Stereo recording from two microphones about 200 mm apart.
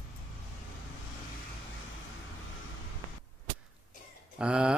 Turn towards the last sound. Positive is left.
turn(degrees=-5)  # may be behind; listen again after turning